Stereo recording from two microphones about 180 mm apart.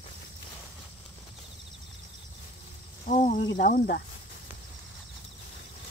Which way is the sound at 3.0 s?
45° left (ahead or behind).